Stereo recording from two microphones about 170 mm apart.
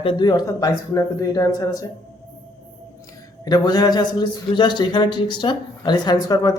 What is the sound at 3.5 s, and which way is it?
A man's voice, 25° left (ahead or behind).